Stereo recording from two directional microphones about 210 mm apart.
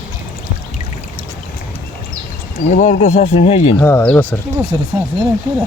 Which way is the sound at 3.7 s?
10° left (ahead or behind).